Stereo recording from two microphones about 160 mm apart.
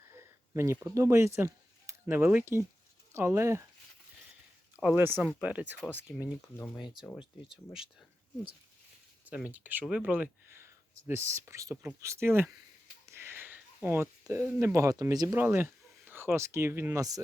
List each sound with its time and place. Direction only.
0.1 s speech: 15° right (ahead or behind)
4.8 s speech: 10° right (ahead or behind)
6.1 s speech: centre (ahead or behind)
7.5 s speech: 5° right (ahead or behind)
9.2 s speech: 10° right (ahead or behind)